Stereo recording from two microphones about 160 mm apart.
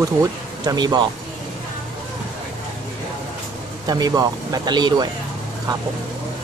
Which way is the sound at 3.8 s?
25° right (ahead or behind).